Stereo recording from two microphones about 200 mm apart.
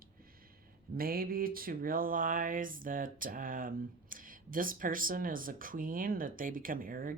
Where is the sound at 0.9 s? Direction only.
50° right (ahead or behind).